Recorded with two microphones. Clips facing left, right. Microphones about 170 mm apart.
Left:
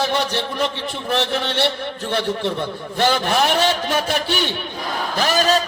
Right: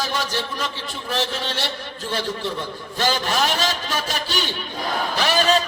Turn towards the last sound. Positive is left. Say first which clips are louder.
# left 1 dB
turn(degrees=45)  # may be behind; listen again after turning